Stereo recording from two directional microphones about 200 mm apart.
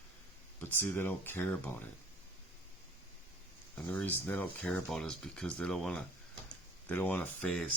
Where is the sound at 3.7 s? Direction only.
10° left (ahead or behind).